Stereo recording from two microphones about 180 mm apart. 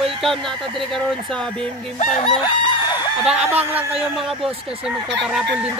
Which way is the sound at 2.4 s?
25° left (ahead or behind).